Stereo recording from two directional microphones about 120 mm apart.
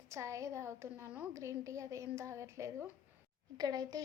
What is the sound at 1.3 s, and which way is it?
A woman's voice, 25° right (ahead or behind).